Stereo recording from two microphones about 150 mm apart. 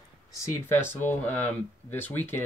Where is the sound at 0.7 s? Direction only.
15° left (ahead or behind).